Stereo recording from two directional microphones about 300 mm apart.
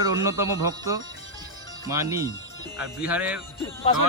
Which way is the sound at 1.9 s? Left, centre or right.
Centre.